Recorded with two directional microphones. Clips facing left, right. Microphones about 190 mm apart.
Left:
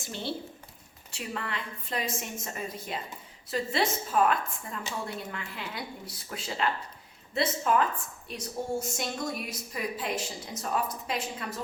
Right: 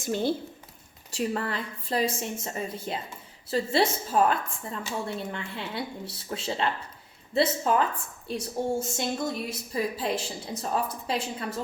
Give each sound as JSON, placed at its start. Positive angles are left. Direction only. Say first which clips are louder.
{"t": 0.0, "sound": "a woman's voice", "louder": "right 8 dB", "side_deg": -45}